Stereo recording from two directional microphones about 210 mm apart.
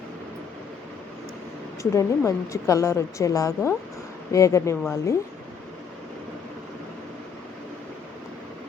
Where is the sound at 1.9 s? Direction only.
15° left (ahead or behind).